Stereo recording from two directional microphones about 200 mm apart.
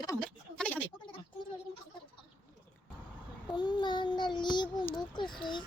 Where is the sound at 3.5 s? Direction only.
25° left (ahead or behind).